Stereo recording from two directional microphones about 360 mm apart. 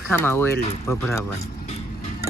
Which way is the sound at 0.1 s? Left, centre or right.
Centre.